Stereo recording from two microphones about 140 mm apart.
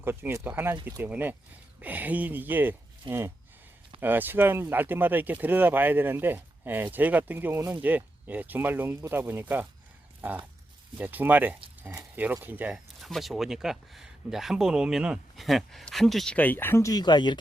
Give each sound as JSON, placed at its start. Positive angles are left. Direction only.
{"t": 0.0, "sound": "speech", "side_deg": -15}
{"t": 10.2, "sound": "a sound", "side_deg": -15}
{"t": 10.9, "sound": "speech", "side_deg": -10}